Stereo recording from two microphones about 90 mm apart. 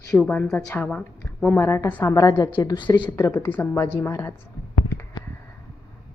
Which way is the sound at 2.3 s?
55° left (ahead or behind).